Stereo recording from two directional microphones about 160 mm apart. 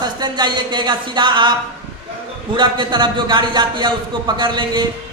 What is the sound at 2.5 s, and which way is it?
Speech, 30° right (ahead or behind).